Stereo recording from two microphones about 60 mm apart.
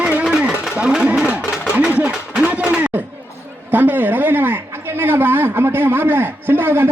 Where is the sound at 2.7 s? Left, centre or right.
Right.